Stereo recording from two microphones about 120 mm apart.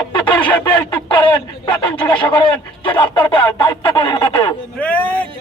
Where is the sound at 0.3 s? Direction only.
45° left (ahead or behind).